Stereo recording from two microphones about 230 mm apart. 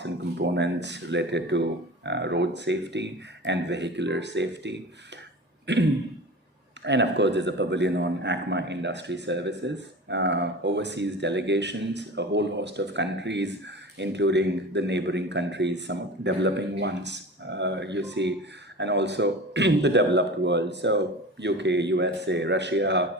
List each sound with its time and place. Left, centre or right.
0.0 s a man's voice: right